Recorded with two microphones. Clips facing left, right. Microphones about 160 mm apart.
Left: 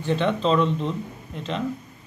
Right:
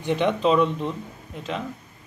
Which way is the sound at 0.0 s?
15° right (ahead or behind).